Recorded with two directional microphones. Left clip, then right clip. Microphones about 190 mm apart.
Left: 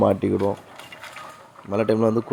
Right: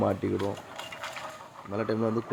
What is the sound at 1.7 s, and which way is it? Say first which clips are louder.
Speech: left 9 dB; 35° left (ahead or behind).